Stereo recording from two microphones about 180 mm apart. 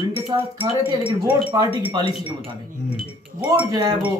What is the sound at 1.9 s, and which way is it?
Speech, 25° right (ahead or behind).